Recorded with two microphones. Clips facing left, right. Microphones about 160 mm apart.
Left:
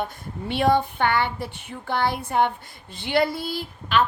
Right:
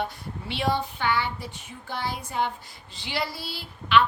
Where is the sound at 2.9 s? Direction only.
55° left (ahead or behind).